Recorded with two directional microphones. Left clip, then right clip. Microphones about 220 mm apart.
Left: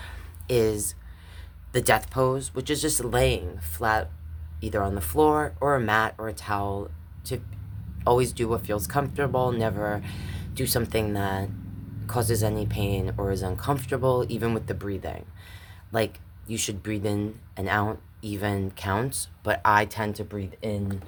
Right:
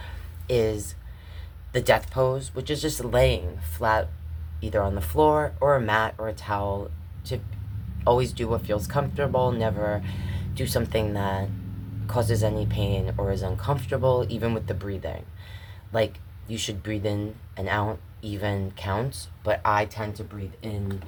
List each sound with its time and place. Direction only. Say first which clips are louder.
0.0 s a sound: even; 25° left (ahead or behind)
1.7 s speech: right 1 dB; 25° left (ahead or behind)
8.0 s speech: even; 25° left (ahead or behind); by 20.7 s 45° left (ahead or behind)